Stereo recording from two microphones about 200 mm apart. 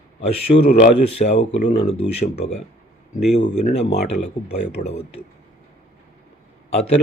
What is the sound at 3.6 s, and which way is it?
Speech, 30° left (ahead or behind).